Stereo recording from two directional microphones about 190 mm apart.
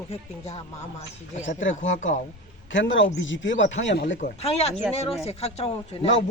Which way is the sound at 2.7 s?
80° left.